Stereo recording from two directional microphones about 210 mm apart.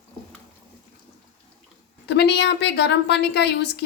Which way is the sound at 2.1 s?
55° left (ahead or behind).